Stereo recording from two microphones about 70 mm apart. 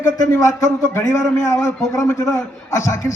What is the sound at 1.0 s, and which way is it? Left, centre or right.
A man's voice, left.